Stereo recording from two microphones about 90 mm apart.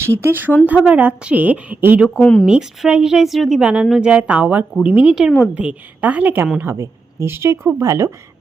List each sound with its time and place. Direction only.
0.0 s a woman's voice: 25° right (ahead or behind)
2.0 s speech: 10° left (ahead or behind)
2.5 s a woman's voice: 10° right (ahead or behind); by 8.1 s 35° right (ahead or behind)